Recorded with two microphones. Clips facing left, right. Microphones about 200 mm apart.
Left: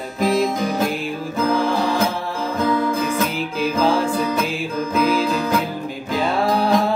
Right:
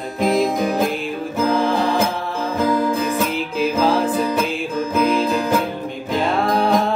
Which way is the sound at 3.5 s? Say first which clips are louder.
Right 1 dB; centre (ahead or behind).